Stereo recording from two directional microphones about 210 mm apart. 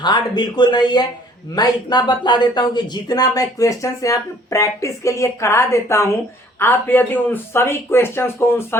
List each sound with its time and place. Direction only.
0.0 s speech: 20° left (ahead or behind)